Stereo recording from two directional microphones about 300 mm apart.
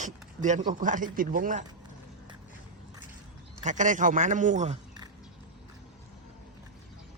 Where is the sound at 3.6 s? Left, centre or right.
Right.